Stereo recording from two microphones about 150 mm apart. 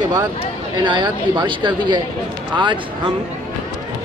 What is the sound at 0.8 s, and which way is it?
Speech, 30° right (ahead or behind).